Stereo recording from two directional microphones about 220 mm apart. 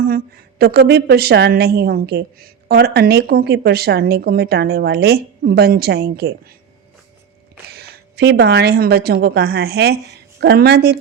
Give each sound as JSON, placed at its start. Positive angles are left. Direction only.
{"t": 0.6, "sound": "a woman's voice", "side_deg": -45}
{"t": 7.7, "sound": "a woman's voice", "side_deg": -45}